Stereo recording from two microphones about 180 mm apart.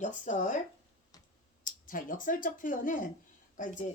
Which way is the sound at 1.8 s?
50° left (ahead or behind).